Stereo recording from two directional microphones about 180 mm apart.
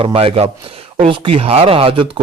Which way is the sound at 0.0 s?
30° right (ahead or behind).